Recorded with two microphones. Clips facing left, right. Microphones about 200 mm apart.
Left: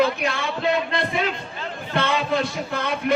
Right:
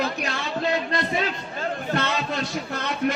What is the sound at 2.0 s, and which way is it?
Speech, 55° left (ahead or behind).